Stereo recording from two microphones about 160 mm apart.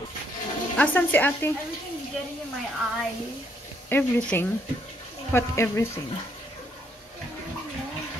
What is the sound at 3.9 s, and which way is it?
Speech, 10° left (ahead or behind).